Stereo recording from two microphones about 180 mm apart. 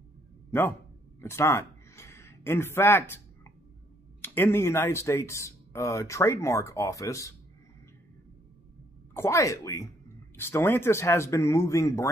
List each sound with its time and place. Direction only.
0.5 s speech: 15° left (ahead or behind)
4.2 s speech: 15° left (ahead or behind)
9.1 s speech: 15° left (ahead or behind)